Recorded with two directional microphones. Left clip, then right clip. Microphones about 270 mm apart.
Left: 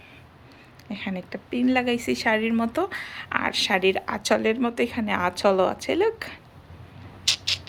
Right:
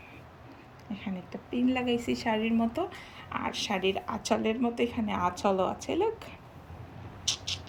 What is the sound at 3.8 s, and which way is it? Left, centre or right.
A woman's voice, centre.